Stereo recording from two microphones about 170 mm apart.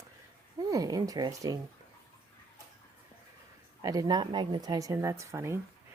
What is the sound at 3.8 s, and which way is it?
Speech, 20° right (ahead or behind).